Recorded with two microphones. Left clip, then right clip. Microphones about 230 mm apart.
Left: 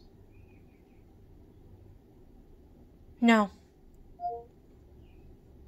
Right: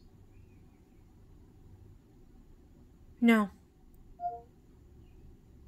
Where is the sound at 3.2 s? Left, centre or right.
Centre.